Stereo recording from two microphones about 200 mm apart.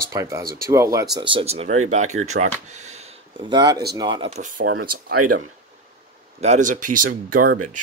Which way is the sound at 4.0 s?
25° right (ahead or behind).